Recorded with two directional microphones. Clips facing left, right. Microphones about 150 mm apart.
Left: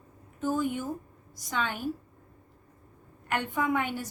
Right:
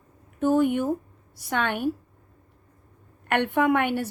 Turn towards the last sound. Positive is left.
turn(degrees=-65)  # may be behind; listen again after turning